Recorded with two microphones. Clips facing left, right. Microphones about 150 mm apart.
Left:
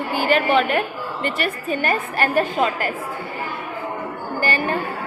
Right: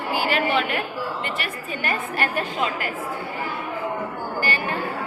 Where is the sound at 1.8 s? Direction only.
40° left (ahead or behind).